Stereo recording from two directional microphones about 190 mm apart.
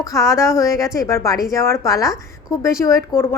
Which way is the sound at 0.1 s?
15° left (ahead or behind).